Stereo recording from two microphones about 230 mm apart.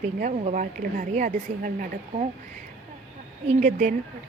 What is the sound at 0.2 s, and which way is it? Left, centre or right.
A woman's voice, right.